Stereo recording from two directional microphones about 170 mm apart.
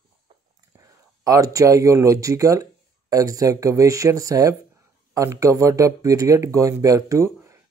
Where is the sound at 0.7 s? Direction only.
20° right (ahead or behind).